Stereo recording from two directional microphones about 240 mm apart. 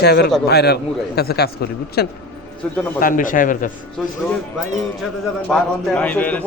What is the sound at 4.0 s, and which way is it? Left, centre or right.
Speech, centre.